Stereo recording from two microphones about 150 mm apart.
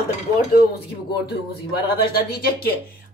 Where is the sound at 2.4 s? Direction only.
90° left.